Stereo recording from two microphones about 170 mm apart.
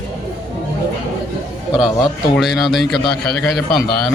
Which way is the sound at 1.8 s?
Centre (ahead or behind).